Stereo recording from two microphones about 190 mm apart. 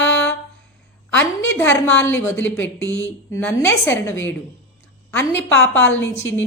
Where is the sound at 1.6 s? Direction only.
10° left (ahead or behind).